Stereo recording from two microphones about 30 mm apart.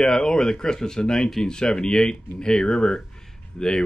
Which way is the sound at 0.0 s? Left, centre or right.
Centre.